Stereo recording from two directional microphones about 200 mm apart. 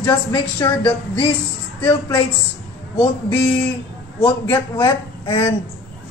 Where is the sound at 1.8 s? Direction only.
25° left (ahead or behind).